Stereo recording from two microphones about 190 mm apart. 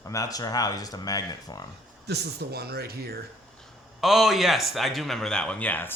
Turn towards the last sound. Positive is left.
turn(degrees=10)  # may be behind; listen again after turning